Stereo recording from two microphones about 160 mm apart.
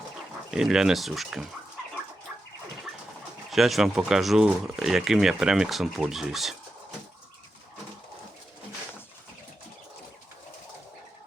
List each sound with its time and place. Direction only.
0.5 s speech: 5° right (ahead or behind)
3.5 s speech: centre (ahead or behind)